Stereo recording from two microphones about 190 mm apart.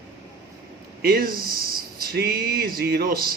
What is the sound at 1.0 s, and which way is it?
Speech, 50° right (ahead or behind).